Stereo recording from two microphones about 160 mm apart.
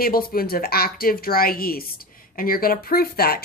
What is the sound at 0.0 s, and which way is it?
A woman's voice, 65° left (ahead or behind).